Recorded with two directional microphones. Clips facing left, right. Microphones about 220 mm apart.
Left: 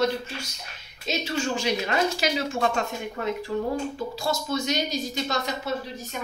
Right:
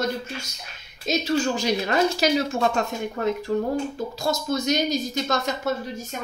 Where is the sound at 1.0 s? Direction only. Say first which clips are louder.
Right 5 dB; 40° right (ahead or behind).